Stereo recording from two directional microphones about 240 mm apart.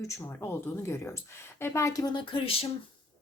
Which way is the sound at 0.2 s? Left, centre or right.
Centre.